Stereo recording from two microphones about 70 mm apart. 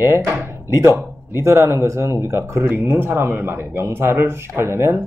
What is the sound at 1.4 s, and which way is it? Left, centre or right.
Speech, right.